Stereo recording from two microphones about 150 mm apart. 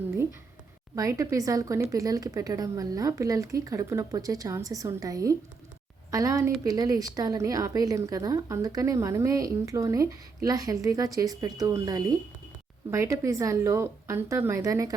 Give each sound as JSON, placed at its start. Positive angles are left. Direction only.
{"t": 0.9, "sound": "a woman's voice", "side_deg": -20}